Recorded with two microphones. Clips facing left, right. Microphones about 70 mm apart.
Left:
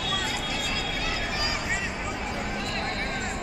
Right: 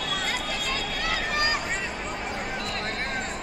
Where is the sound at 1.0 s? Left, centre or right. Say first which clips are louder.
Right 3 dB; right.